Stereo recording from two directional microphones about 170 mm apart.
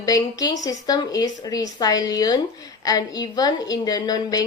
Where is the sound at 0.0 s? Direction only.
20° left (ahead or behind).